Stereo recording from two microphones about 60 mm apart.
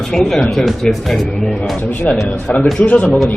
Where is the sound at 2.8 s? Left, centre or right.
Left.